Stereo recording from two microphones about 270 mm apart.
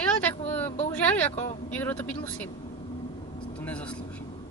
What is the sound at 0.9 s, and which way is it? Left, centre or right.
A man's voice, centre.